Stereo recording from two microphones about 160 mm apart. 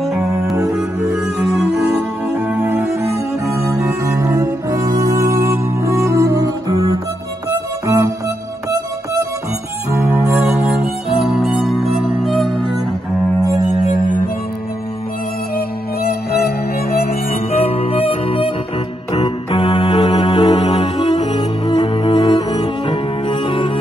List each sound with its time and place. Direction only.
0.0 s music: centre (ahead or behind)
3.7 s music: 20° right (ahead or behind)
10.0 s music: 15° right (ahead or behind)
15.5 s music: 75° left (ahead or behind)
17.3 s music: 40° left (ahead or behind)
19.5 s organ: 30° left (ahead or behind)
20.0 s mantra: 30° left (ahead or behind)
20.7 s music: 40° left (ahead or behind)
21.2 s cello: 30° left (ahead or behind)